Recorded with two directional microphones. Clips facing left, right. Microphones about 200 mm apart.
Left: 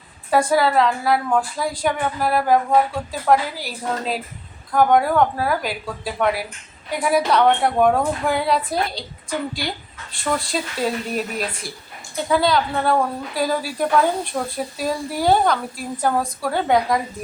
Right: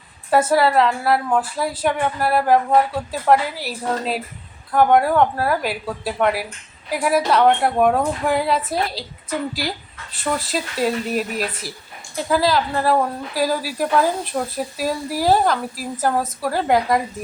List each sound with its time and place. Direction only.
0.3 s a woman's voice: 5° right (ahead or behind)